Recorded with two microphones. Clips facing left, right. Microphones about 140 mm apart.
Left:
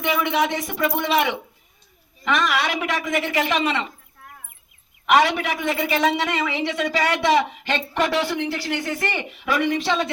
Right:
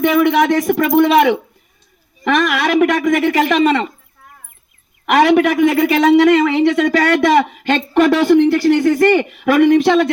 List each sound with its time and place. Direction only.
0.0 s a woman's voice: 55° right (ahead or behind)
5.0 s a woman's voice: 55° right (ahead or behind)